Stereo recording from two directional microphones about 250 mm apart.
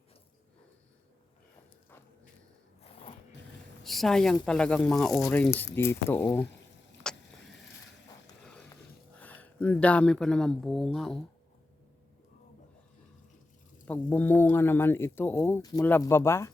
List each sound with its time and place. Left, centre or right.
2.8 s a sound: left
3.8 s speech: centre
7.1 s vehicle: centre
9.1 s speech: centre
13.8 s speech: centre